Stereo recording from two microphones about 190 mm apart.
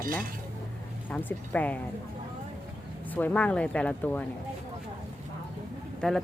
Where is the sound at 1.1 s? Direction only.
10° left (ahead or behind).